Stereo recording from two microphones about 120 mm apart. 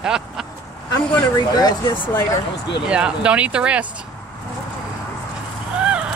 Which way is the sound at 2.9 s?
10° right (ahead or behind).